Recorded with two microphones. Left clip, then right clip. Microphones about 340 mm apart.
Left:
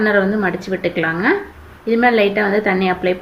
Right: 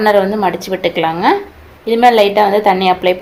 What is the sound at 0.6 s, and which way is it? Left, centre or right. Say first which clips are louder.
Speech: right 4 dB; centre.